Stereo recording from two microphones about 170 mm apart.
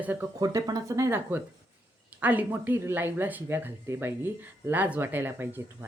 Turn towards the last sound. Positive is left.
turn(degrees=-15)  # may be behind; listen again after turning